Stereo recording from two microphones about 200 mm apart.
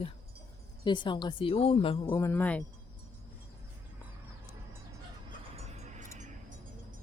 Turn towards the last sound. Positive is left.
turn(degrees=-35)  # may be behind; listen again after turning